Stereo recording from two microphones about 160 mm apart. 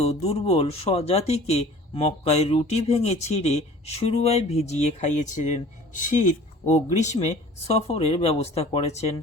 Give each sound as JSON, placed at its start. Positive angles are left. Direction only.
{"t": 0.0, "sound": "speech", "side_deg": 40}